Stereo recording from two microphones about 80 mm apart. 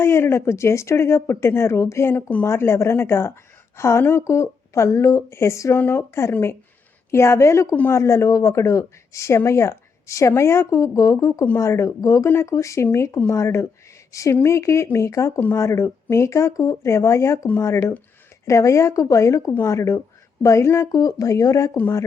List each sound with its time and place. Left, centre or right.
0.0 s speech: left